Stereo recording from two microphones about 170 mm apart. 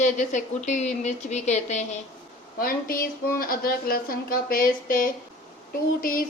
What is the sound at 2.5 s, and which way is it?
A woman's voice, 60° left (ahead or behind).